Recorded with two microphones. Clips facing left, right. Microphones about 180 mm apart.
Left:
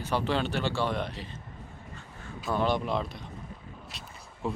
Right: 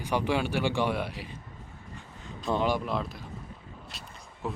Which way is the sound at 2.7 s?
Centre (ahead or behind).